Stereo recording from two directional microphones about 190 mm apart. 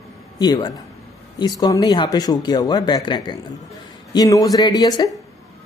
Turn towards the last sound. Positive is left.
turn(degrees=20)  # may be behind; listen again after turning